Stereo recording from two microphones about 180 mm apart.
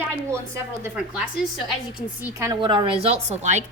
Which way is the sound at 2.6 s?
25° right (ahead or behind).